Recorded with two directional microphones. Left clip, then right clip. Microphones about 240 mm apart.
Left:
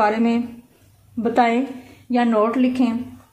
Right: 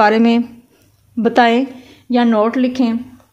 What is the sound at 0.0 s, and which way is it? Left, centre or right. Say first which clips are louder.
Speech: right 7 dB; right.